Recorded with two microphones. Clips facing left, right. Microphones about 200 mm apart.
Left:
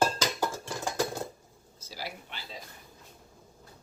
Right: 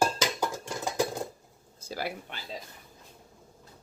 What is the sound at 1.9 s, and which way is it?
Speech, 55° right (ahead or behind).